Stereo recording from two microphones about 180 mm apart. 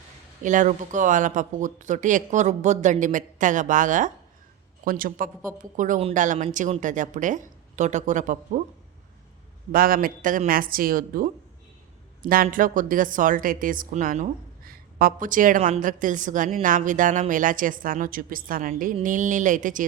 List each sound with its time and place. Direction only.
0.4 s speech: 45° right (ahead or behind)
9.7 s speech: 55° right (ahead or behind)